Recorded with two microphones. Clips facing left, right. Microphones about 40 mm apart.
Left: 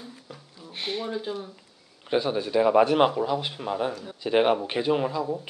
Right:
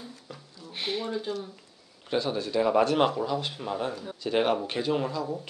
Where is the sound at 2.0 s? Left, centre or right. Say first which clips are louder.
Left 3 dB; centre.